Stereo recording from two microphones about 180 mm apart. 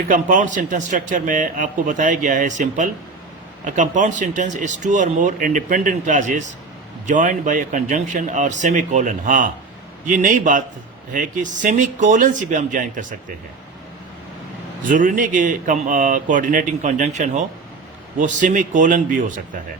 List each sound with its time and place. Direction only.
0.1 s a man's voice: 45° right (ahead or behind)
14.8 s a man's voice: 45° right (ahead or behind)